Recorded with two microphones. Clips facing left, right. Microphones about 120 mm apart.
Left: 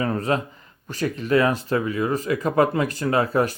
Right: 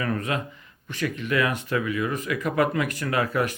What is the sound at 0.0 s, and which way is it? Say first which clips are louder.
Speech: left 4 dB; 30° left (ahead or behind).